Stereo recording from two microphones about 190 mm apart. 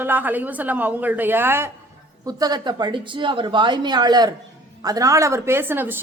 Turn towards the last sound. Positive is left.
turn(degrees=-10)  # may be behind; listen again after turning